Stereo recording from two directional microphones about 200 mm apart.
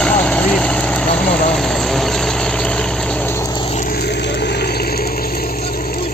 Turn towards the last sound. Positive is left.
turn(degrees=45)  # may be behind; listen again after turning